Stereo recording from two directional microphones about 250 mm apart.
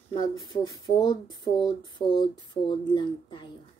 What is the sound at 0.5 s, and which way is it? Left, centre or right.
Speech, centre.